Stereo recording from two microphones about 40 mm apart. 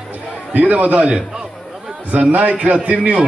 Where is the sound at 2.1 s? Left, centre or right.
Right.